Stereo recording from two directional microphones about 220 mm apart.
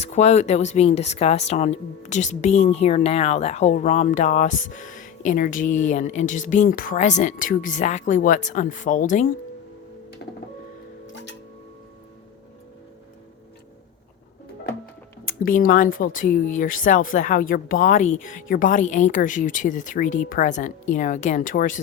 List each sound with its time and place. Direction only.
0.0 s speech: 30° left (ahead or behind)
11.0 s music: 55° left (ahead or behind)
15.2 s speech: 40° left (ahead or behind)